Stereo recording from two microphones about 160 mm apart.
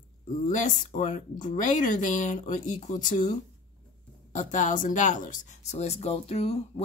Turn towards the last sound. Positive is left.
turn(degrees=40)  # may be behind; listen again after turning